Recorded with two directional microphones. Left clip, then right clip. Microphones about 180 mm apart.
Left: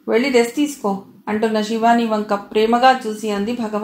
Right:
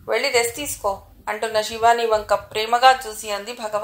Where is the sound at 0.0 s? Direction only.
40° right (ahead or behind).